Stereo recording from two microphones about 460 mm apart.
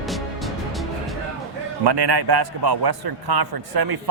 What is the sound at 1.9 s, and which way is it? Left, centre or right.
A man's voice, right.